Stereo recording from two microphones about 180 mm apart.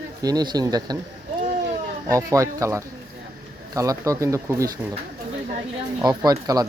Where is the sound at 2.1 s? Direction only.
15° right (ahead or behind).